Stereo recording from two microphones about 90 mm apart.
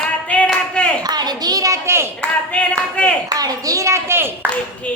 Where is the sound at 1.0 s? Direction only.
50° right (ahead or behind); by 2.0 s 30° right (ahead or behind).